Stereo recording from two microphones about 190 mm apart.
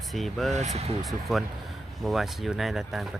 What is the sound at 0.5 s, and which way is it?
Speech, 35° right (ahead or behind).